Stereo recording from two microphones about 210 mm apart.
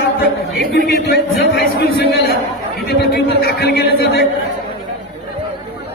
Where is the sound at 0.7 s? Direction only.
50° left (ahead or behind).